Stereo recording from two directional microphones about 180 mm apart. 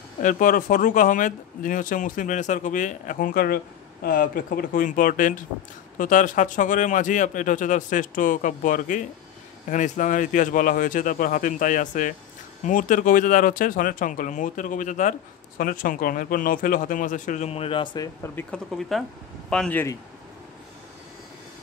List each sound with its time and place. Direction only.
0.2 s speech: 50° left (ahead or behind); by 20.0 s 10° left (ahead or behind)